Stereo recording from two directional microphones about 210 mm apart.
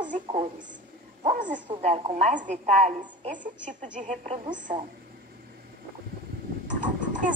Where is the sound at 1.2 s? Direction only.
35° right (ahead or behind).